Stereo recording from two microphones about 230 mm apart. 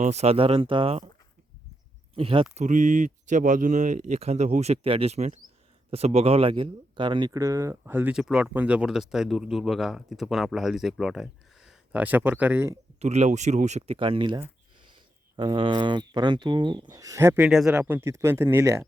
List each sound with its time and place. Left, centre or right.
0.0 s speech: right
2.1 s speech: right
13.0 s speech: right; by 18.9 s centre